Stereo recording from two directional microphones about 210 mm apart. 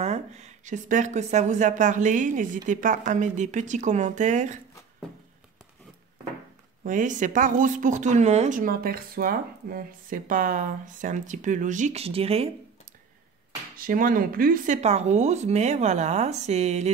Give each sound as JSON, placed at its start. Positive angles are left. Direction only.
{"t": 0.0, "sound": "speech", "side_deg": -30}
{"t": 6.8, "sound": "speech", "side_deg": -40}
{"t": 13.7, "sound": "speech", "side_deg": -40}